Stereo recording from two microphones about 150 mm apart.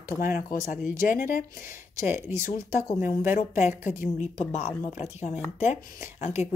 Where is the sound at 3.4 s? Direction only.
55° left (ahead or behind).